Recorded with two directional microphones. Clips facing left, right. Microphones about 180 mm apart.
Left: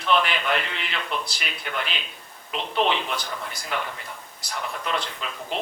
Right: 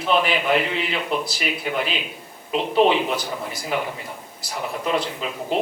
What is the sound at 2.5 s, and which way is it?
Speech, 40° right (ahead or behind).